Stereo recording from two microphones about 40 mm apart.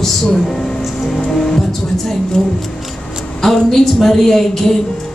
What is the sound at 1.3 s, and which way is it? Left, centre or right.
Car, centre.